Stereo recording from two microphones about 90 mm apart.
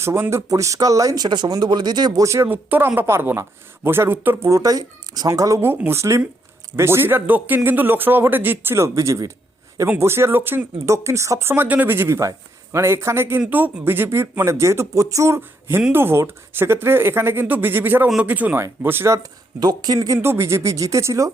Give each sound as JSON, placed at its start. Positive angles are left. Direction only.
{"t": 0.0, "sound": "speech", "side_deg": -30}
{"t": 2.2, "sound": "speech", "side_deg": -35}
{"t": 2.5, "sound": "speech", "side_deg": -20}
{"t": 4.4, "sound": "speech", "side_deg": -40}
{"t": 5.5, "sound": "speech", "side_deg": -25}
{"t": 13.4, "sound": "speech", "side_deg": -15}
{"t": 19.2, "sound": "speech", "side_deg": -50}
{"t": 20.1, "sound": "speech", "side_deg": -30}